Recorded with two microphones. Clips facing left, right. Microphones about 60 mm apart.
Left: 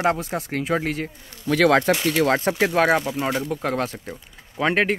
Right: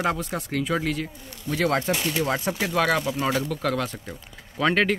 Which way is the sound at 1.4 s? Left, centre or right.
Left.